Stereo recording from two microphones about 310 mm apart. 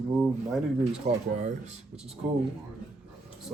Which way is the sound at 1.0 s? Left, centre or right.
Right.